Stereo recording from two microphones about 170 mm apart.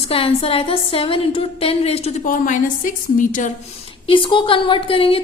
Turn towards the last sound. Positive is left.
turn(degrees=30)  # may be behind; listen again after turning